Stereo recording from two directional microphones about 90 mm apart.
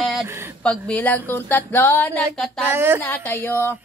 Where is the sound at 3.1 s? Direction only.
25° left (ahead or behind).